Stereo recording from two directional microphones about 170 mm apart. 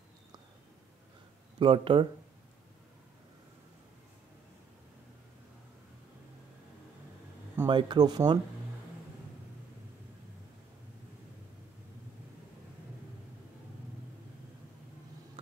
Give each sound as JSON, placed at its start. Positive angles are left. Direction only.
{"t": 1.6, "sound": "speech", "side_deg": -30}
{"t": 7.6, "sound": "speech", "side_deg": -25}